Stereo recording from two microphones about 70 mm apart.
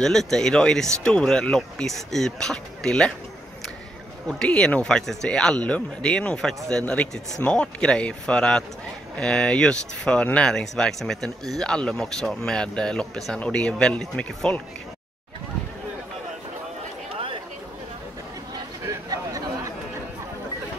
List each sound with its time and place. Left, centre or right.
0.0 s speech: centre
4.3 s speech: centre
10.5 s speech: centre
19.0 s a sound: right